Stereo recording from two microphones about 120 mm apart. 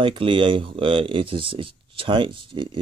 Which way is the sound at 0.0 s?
45° right (ahead or behind).